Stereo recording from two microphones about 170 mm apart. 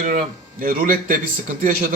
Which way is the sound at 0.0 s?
55° right (ahead or behind).